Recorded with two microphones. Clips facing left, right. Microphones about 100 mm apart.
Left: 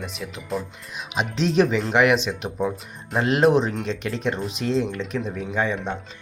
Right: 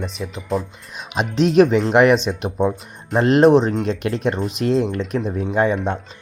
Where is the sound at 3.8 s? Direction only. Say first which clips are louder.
Right 6 dB; 50° right (ahead or behind).